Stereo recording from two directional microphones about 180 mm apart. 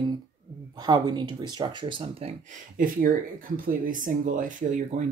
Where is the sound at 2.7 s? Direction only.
50° right (ahead or behind).